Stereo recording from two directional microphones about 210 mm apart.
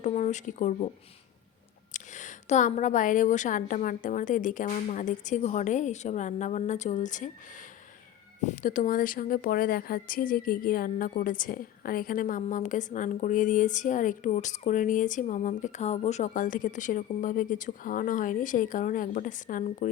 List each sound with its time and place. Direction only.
0.0 s a woman's voice: 35° left (ahead or behind)
1.9 s a woman's voice: 35° left (ahead or behind)
8.4 s a woman's voice: 35° left (ahead or behind)